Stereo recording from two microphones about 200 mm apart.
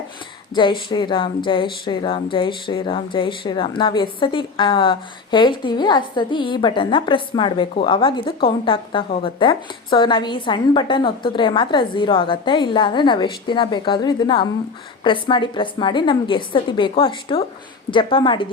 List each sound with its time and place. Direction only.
0.5 s a woman's voice: 25° left (ahead or behind)